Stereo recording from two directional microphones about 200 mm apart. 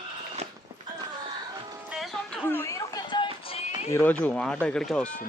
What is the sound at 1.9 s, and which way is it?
Music, centre (ahead or behind).